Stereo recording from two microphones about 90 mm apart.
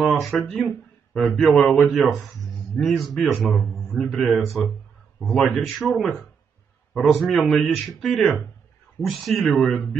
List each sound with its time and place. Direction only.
0.2 s a man's voice: centre (ahead or behind)